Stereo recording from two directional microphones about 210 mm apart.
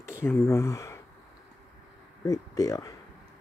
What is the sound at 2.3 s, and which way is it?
Speech, 15° left (ahead or behind).